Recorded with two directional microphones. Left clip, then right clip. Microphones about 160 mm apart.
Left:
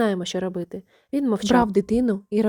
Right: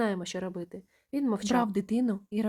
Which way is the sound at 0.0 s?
35° left (ahead or behind).